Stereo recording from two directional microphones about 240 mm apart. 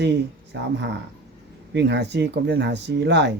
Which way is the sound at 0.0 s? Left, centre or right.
Right.